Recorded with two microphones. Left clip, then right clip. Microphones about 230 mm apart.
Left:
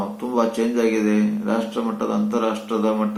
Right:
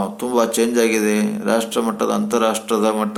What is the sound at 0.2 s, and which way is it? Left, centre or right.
Speech, right.